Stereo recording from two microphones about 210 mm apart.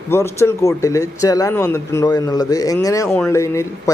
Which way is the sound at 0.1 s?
10° left (ahead or behind).